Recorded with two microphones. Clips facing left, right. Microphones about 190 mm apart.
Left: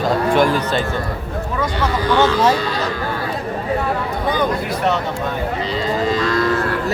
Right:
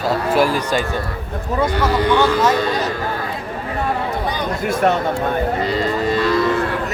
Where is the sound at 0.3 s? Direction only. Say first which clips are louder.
Even; 5° right (ahead or behind).